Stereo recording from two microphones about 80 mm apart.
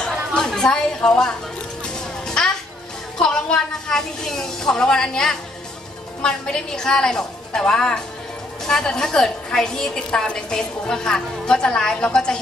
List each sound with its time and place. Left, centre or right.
0.0 s chatter: centre
1.9 s music: centre
3.2 s a woman's voice: centre